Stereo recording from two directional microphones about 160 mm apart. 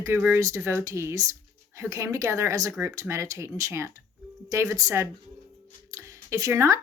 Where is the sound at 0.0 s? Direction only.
15° right (ahead or behind).